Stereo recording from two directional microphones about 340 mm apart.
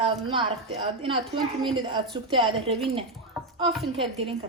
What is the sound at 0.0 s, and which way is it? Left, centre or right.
A woman's voice, centre.